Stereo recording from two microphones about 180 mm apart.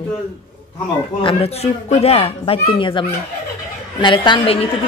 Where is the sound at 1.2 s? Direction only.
35° left (ahead or behind).